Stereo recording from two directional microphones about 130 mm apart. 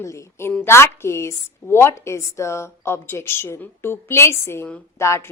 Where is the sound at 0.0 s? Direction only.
20° left (ahead or behind).